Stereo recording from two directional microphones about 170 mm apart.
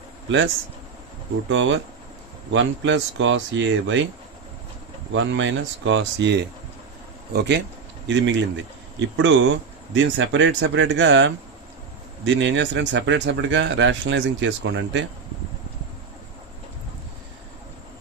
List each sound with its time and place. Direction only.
0.3 s speech: 90° right
1.5 s speech: 90° right
5.1 s speech: 90° right